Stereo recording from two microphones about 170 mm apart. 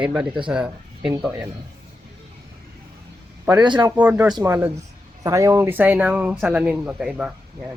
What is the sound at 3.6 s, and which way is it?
Speech, 20° right (ahead or behind).